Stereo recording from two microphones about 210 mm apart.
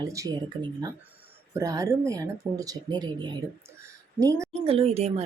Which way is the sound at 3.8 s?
15° right (ahead or behind).